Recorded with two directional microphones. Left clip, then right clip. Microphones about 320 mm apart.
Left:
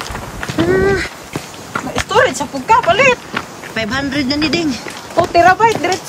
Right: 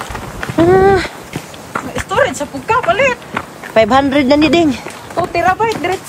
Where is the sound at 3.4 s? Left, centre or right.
Centre.